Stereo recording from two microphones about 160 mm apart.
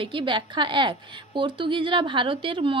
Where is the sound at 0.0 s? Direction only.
30° right (ahead or behind).